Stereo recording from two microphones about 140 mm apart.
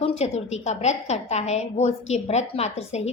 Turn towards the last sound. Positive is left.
turn(degrees=50)  # may be behind; listen again after turning